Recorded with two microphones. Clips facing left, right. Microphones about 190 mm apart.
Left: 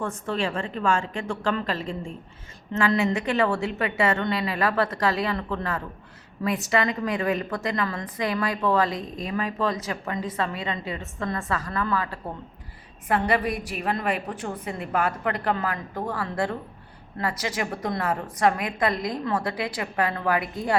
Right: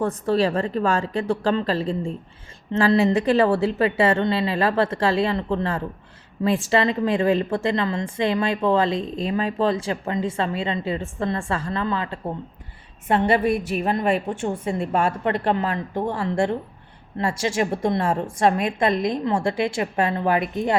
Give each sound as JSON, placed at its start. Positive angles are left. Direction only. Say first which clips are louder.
{"t": 0.0, "sound": "a woman's voice", "louder": "right 7 dB", "side_deg": -35}